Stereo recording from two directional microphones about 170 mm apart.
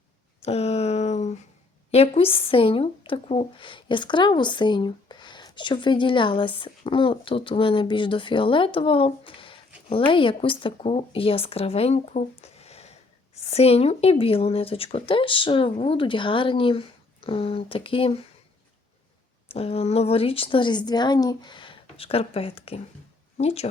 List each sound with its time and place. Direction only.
0.4 s a sound: 40° left (ahead or behind)
1.9 s speech: 35° left (ahead or behind)
19.5 s speech: 35° left (ahead or behind)